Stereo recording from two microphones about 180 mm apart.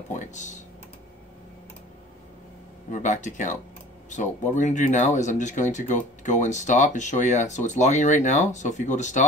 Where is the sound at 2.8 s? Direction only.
45° left (ahead or behind).